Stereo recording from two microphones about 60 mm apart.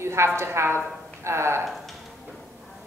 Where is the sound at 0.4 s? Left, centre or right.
Right.